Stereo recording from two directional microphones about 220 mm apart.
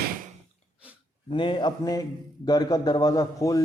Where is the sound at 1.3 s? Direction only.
20° left (ahead or behind).